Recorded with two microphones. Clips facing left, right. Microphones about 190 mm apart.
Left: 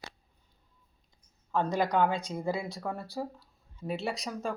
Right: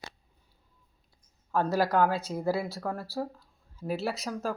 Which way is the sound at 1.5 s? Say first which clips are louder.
Right 2 dB; 5° right (ahead or behind).